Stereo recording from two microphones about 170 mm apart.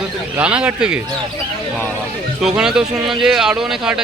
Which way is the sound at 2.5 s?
5° right (ahead or behind).